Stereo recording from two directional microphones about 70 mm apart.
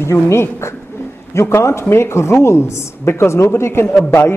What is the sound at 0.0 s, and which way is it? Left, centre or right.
A woman's voice, left.